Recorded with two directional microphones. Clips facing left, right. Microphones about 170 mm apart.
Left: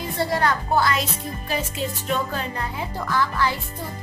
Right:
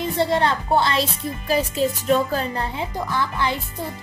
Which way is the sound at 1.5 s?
35° right (ahead or behind).